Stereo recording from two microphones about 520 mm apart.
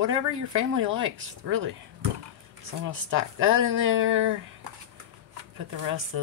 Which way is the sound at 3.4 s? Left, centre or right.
Right.